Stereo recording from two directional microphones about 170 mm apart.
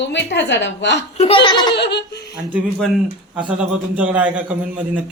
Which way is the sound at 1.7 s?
85° left.